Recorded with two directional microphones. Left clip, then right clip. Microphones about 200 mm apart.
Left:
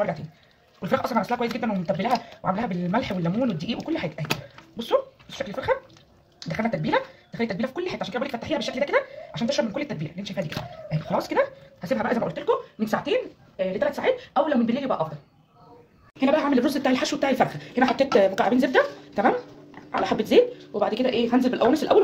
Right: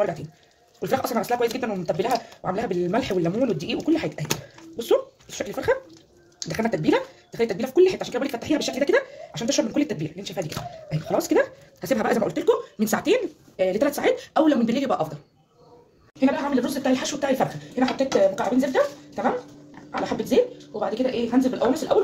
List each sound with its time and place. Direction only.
0.7 s speech: 45° right (ahead or behind)
13.7 s speech: 65° right (ahead or behind)
16.2 s speech: 25° left (ahead or behind)
18.3 s speech: 40° left (ahead or behind)